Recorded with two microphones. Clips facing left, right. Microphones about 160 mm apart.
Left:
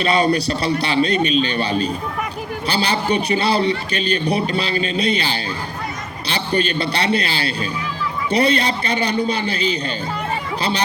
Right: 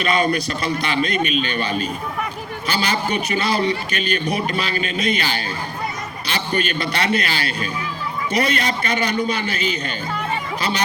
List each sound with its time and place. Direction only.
0.0 s a man's voice: 35° left (ahead or behind)
2.6 s a man's voice: 30° left (ahead or behind)